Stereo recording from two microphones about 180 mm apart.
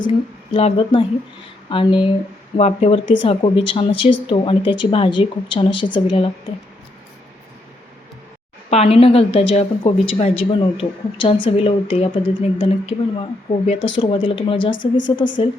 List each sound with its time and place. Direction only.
0.5 s speech: 30° left (ahead or behind)
8.7 s a woman's voice: 35° left (ahead or behind)